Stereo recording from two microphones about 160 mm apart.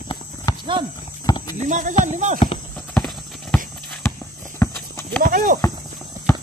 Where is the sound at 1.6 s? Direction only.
50° right (ahead or behind).